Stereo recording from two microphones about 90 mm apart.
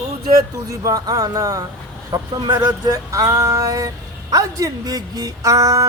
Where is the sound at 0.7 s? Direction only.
40° right (ahead or behind).